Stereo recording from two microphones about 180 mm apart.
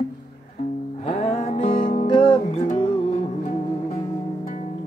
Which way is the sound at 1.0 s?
35° left (ahead or behind).